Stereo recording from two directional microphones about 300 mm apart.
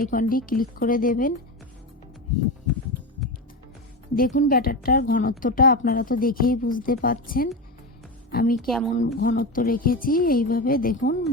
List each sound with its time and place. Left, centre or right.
0.0 s a woman's voice: left
4.1 s a woman's voice: left
8.5 s speech: centre
9.1 s a woman's voice: left